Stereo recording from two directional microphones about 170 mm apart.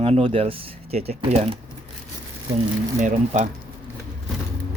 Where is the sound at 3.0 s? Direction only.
45° right (ahead or behind).